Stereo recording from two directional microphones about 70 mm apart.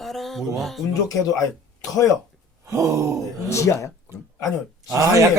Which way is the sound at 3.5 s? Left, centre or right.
Left.